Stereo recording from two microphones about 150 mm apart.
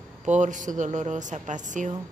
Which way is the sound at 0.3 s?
55° right (ahead or behind).